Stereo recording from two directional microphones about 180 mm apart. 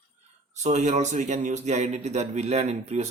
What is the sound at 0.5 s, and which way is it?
Speech, 40° right (ahead or behind).